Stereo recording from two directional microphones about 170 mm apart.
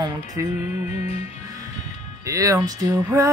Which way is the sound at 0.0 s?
20° right (ahead or behind).